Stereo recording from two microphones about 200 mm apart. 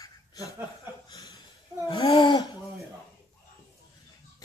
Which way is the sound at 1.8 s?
25° left (ahead or behind).